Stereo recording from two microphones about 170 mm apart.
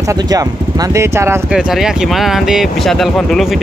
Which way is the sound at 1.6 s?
5° right (ahead or behind).